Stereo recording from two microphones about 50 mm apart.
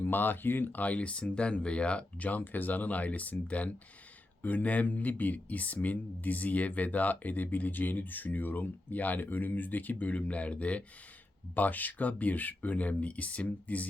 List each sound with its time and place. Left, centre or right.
0.0 s speech: left